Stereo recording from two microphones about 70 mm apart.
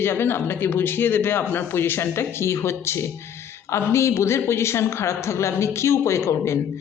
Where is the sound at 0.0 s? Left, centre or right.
Left.